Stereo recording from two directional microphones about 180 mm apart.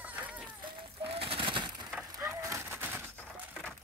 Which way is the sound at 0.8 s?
30° right (ahead or behind).